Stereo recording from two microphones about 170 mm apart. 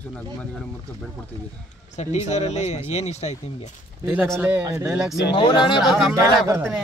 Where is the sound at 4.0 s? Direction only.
10° right (ahead or behind).